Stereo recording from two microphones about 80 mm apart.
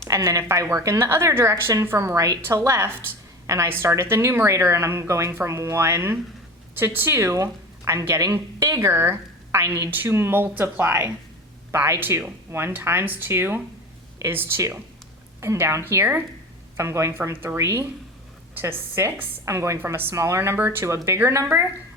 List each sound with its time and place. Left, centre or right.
0.1 s a woman's voice: right
10.1 s a woman's voice: right